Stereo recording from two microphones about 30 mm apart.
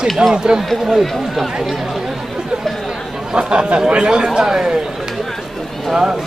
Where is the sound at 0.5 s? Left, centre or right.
Centre.